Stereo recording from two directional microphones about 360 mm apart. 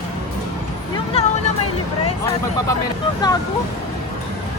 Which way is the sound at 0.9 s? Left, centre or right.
Centre.